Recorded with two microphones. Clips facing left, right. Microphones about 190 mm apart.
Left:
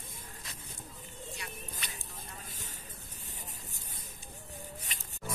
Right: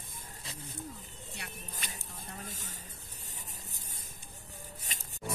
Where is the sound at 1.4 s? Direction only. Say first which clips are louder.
Left 1 dB; 45° right (ahead or behind).